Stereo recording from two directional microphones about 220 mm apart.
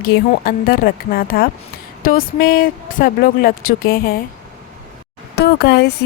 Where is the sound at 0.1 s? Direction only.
45° left (ahead or behind).